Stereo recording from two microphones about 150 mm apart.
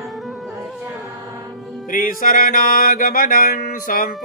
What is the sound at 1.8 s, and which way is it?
Music, 65° left (ahead or behind).